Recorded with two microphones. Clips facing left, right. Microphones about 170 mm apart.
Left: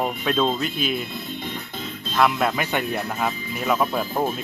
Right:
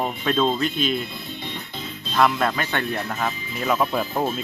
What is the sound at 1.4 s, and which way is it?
Music, 50° left (ahead or behind).